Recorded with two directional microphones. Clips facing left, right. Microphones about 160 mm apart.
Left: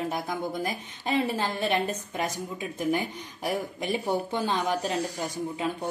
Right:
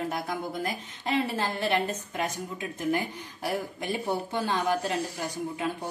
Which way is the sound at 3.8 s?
20° left (ahead or behind).